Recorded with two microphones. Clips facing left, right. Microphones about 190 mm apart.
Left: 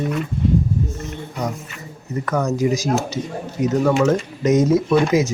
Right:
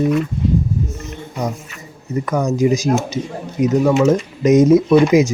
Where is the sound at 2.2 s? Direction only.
15° right (ahead or behind).